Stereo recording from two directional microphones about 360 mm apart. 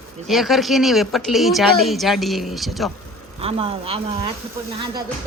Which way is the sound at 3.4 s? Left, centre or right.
Centre.